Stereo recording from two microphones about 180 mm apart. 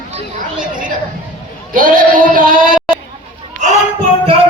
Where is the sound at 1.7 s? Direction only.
50° right (ahead or behind).